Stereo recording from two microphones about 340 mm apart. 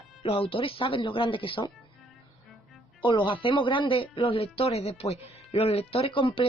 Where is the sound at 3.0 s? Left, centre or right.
Centre.